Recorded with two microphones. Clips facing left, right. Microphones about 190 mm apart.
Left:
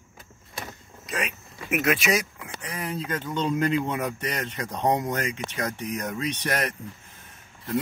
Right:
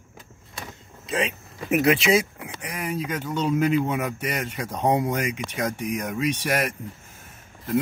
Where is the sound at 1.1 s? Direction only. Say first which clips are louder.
Right 5 dB; 30° right (ahead or behind).